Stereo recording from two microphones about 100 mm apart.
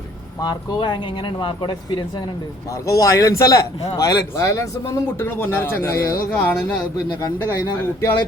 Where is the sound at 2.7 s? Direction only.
35° left (ahead or behind).